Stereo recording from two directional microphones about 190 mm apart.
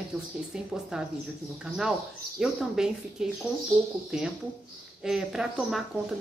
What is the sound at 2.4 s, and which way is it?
Speech, 5° right (ahead or behind).